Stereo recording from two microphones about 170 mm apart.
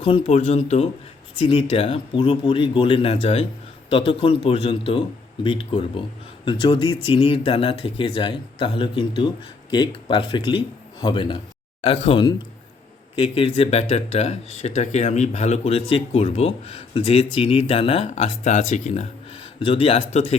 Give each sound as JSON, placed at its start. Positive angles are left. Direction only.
{"t": 0.0, "sound": "speech", "side_deg": 35}